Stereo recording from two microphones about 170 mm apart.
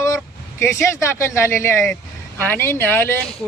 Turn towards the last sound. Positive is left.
turn(degrees=10)  # may be behind; listen again after turning